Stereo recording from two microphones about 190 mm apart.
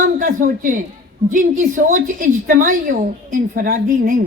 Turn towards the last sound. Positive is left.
turn(degrees=-45)  # may be behind; listen again after turning